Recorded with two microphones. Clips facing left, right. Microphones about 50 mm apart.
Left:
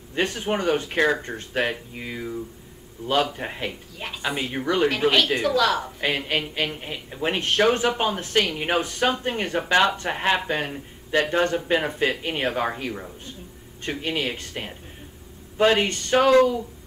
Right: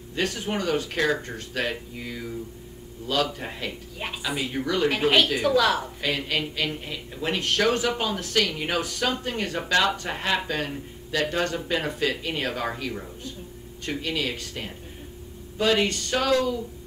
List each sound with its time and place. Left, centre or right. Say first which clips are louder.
0.1 s a man's voice: left 3 dB; left
5.4 s a woman's voice: even; centre
5.9 s a man's voice: left 2 dB; left